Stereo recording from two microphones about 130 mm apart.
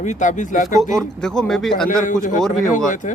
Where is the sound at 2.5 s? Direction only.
85° left.